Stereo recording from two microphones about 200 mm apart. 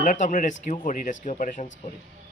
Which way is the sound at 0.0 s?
40° left (ahead or behind).